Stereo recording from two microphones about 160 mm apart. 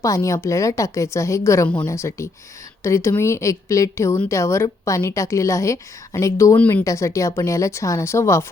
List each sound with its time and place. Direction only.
0.0 s a woman's voice: 20° left (ahead or behind)